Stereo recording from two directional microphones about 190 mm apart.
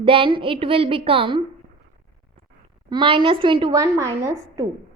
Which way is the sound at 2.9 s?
25° right (ahead or behind).